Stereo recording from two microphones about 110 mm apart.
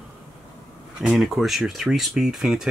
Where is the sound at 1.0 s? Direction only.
5° right (ahead or behind).